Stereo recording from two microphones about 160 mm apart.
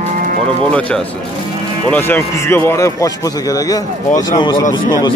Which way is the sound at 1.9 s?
10° left (ahead or behind).